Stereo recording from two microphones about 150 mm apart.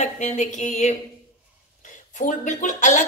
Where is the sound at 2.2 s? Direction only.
55° left (ahead or behind).